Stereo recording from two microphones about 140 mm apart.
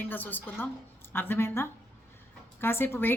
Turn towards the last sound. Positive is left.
turn(degrees=15)  # may be behind; listen again after turning